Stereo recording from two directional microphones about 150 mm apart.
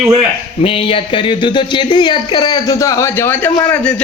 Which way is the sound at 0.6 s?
35° left (ahead or behind).